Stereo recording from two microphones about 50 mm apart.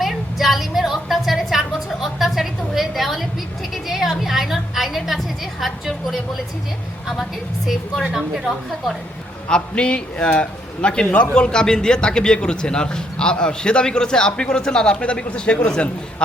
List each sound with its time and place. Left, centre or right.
0.0 s a sound: centre
9.5 s a man's voice: centre
11.3 s a man's voice: centre